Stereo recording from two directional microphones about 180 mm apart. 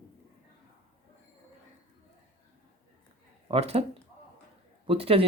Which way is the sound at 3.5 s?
35° right (ahead or behind).